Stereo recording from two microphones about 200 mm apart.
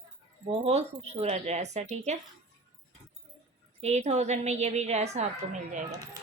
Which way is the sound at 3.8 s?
35° right (ahead or behind).